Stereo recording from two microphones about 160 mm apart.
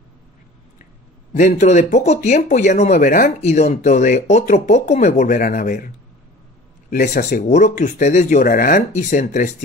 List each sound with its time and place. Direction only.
1.3 s speech: 50° left (ahead or behind)
3.3 s speech: 45° left (ahead or behind)
6.9 s speech: 55° left (ahead or behind)